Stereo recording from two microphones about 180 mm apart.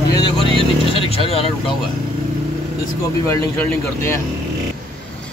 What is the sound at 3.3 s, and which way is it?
Speech, 15° left (ahead or behind).